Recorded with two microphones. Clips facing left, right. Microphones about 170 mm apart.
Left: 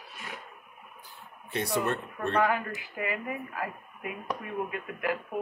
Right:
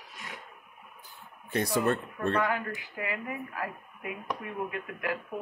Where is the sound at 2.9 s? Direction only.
20° left (ahead or behind).